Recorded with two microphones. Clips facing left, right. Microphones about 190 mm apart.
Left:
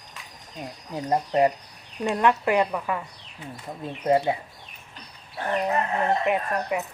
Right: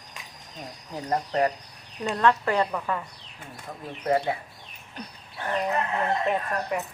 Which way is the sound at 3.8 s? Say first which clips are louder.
Left 3 dB; 20° left (ahead or behind).